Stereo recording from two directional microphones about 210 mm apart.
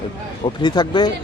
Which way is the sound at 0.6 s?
20° left (ahead or behind).